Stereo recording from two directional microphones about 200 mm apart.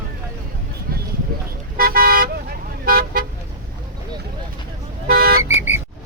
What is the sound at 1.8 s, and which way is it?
Car, 45° right (ahead or behind).